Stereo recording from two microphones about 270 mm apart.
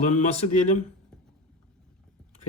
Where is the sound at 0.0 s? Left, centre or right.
Left.